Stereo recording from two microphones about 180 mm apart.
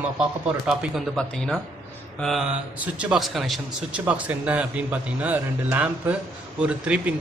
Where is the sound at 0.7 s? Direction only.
Centre (ahead or behind).